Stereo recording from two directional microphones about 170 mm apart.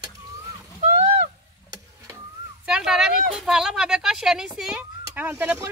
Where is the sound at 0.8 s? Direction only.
45° right (ahead or behind).